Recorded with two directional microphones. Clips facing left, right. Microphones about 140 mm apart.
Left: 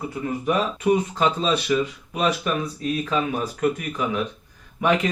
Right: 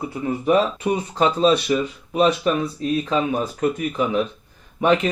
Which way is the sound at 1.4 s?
35° right (ahead or behind).